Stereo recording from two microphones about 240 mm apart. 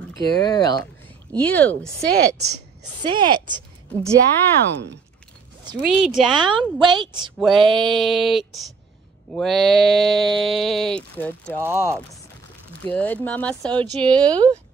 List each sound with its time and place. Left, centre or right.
0.2 s speech: centre
2.0 s a woman's voice: right
3.0 s speech: centre
5.8 s a sound: centre
6.5 s a woman's voice: centre
7.3 s a sound: centre
11.6 s speech: centre
12.8 s a sound: centre
13.7 s a woman's voice: centre